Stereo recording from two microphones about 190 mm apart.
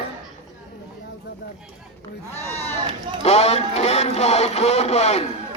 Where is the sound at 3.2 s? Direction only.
35° left (ahead or behind).